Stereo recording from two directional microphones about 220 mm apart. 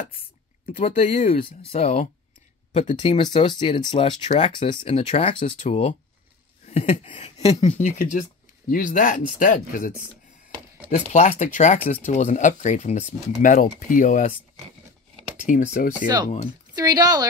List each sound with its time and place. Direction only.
0.8 s speech: 30° left (ahead or behind)
11.1 s speech: 30° left (ahead or behind)
15.4 s speech: 35° left (ahead or behind)
16.7 s speech: 15° right (ahead or behind)